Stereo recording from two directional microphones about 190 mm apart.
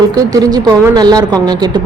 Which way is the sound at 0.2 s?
20° right (ahead or behind).